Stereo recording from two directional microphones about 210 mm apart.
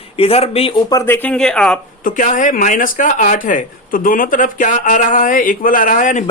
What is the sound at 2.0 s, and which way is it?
Speech, 40° left (ahead or behind).